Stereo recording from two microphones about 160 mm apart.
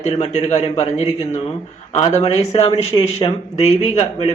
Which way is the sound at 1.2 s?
45° left (ahead or behind).